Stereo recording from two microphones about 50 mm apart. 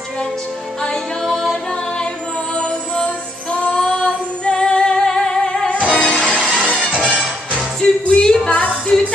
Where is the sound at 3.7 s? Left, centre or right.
Centre.